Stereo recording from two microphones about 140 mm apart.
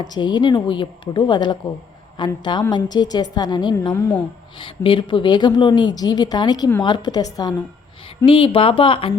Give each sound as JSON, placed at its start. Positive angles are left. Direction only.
{"t": 0.0, "sound": "a woman's voice", "side_deg": 30}
{"t": 8.2, "sound": "a woman's voice", "side_deg": 40}